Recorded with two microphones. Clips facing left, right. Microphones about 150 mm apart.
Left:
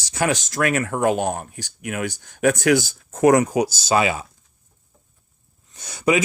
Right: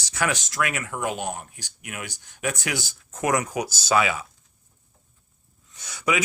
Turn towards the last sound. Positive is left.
turn(degrees=35)  # may be behind; listen again after turning